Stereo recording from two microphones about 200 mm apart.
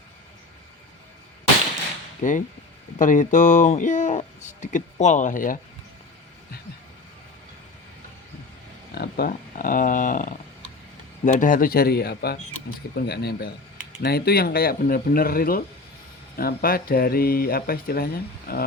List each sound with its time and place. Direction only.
2.2 s speech: 40° left (ahead or behind)
9.0 s speech: 50° left (ahead or behind)